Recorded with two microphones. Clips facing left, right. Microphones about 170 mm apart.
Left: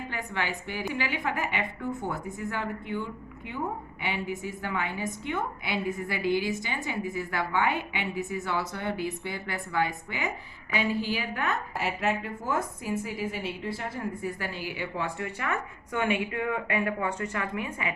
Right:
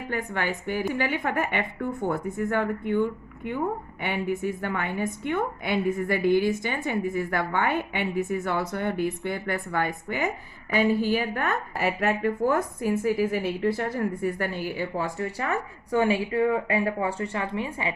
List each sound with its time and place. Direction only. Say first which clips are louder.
0.1 s a woman's voice: right 6 dB; 50° right (ahead or behind); by 17.9 s 30° right (ahead or behind)